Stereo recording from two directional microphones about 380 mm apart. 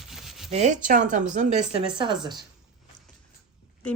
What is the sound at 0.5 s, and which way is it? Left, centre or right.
Speech, centre.